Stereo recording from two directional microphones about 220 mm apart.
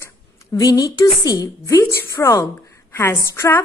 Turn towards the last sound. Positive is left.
turn(degrees=10)  # may be behind; listen again after turning